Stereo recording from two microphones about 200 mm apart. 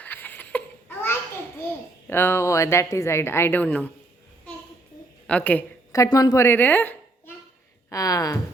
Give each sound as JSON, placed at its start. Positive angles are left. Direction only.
{"t": 0.0, "sound": "babbling", "side_deg": 10}
{"t": 2.0, "sound": "a woman's voice", "side_deg": 10}
{"t": 5.2, "sound": "a woman's voice", "side_deg": 5}